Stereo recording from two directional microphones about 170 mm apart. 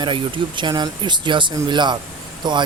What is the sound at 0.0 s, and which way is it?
Speech, 30° right (ahead or behind).